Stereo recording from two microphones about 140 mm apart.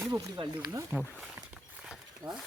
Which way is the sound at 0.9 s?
5° right (ahead or behind).